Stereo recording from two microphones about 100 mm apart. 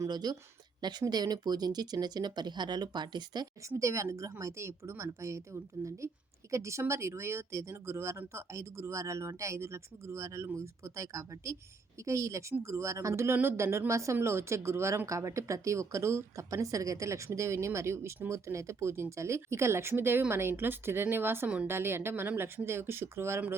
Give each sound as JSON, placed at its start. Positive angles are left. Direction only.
{"t": 0.0, "sound": "speech", "side_deg": -40}
{"t": 3.8, "sound": "a woman's voice", "side_deg": -30}
{"t": 5.8, "sound": "a woman's voice", "side_deg": -15}
{"t": 6.5, "sound": "speech", "side_deg": -30}